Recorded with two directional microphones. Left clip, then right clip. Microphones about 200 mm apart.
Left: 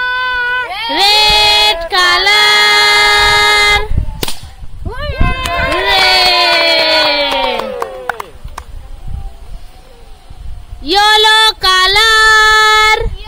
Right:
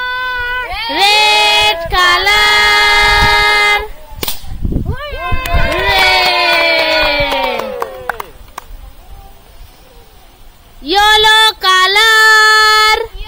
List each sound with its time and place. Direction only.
0.0 s baby cry: 20° left (ahead or behind)
0.7 s child singing: centre (ahead or behind)
4.8 s cat: 20° left (ahead or behind)
5.7 s crowd: centre (ahead or behind)
10.8 s child singing: centre (ahead or behind)